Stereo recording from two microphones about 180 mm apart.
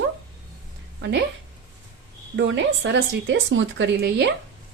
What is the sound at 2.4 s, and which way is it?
Speech, 90° right.